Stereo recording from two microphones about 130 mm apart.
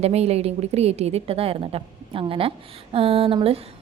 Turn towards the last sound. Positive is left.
turn(degrees=-45)  # may be behind; listen again after turning